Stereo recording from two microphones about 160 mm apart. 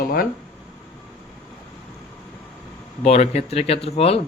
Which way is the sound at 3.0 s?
40° left (ahead or behind).